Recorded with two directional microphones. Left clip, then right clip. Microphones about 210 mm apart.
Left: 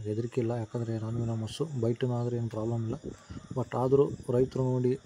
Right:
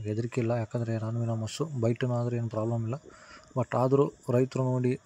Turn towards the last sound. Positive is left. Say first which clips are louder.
# even
turn(degrees=-15)  # may be behind; listen again after turning